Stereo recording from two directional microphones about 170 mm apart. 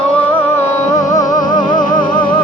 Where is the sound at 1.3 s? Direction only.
50° left (ahead or behind).